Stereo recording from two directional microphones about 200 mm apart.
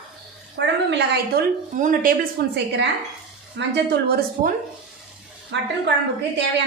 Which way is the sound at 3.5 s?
60° right (ahead or behind).